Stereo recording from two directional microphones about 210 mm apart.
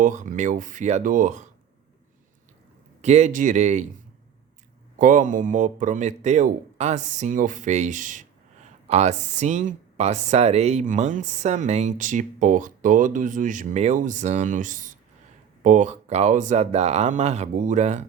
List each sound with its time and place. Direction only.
0.0 s speech: 35° right (ahead or behind)
3.0 s speech: 35° right (ahead or behind)
4.9 s speech: 40° right (ahead or behind)